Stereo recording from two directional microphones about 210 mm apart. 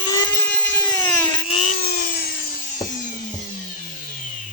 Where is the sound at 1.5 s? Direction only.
35° left (ahead or behind).